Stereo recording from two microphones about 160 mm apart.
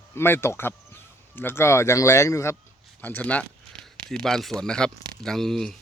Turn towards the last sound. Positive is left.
turn(degrees=5)  # may be behind; listen again after turning